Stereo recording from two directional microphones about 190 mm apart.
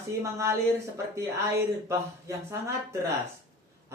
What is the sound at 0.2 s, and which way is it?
Speech, 15° right (ahead or behind).